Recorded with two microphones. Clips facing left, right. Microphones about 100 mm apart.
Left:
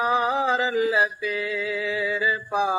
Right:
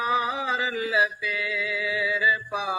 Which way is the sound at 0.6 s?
25° left (ahead or behind).